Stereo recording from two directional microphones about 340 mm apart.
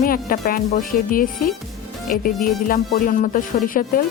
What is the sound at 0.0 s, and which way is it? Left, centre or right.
Speech, left.